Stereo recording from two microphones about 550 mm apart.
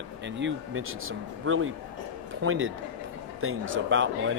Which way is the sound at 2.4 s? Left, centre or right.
Right.